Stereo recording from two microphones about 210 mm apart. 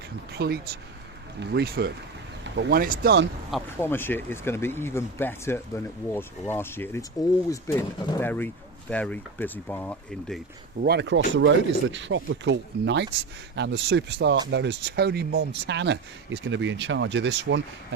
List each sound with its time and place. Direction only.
0.3 s speech: 50° right (ahead or behind)
3.8 s speech: 10° left (ahead or behind)
10.8 s speech: 50° right (ahead or behind)